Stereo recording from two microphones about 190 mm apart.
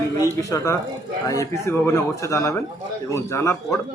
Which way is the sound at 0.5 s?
15° left (ahead or behind).